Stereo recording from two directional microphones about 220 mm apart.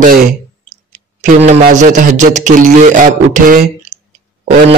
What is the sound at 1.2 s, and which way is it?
Speech, 35° right (ahead or behind).